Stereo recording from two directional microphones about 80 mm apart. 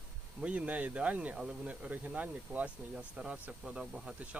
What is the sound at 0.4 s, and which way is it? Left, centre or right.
Speech, centre.